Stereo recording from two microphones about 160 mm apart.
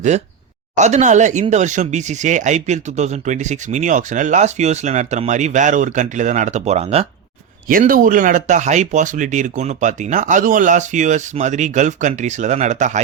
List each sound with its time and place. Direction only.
0.8 s speech: 45° right (ahead or behind)
7.7 s speech: 60° right (ahead or behind)